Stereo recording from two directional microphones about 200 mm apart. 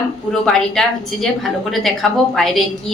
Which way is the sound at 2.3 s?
Centre (ahead or behind).